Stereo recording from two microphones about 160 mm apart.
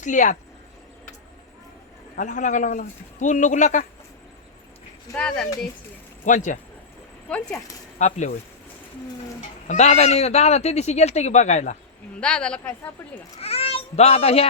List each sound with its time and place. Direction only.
0.0 s speech: 55° left (ahead or behind)
2.1 s speech: 55° left (ahead or behind)
5.1 s a woman's voice: 10° left (ahead or behind)
6.2 s speech: 50° left (ahead or behind)
7.3 s a woman's voice: 5° left (ahead or behind)
7.9 s speech: 45° left (ahead or behind)
9.6 s speech: 45° left (ahead or behind)
12.2 s a woman's voice: 5° left (ahead or behind)
13.4 s speech: 40° left (ahead or behind)